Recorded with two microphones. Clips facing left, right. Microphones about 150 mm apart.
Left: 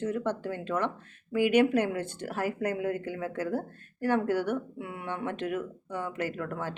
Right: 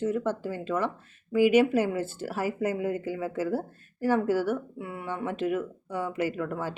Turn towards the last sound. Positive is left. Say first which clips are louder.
# right 3 dB
turn(degrees=-10)  # may be behind; listen again after turning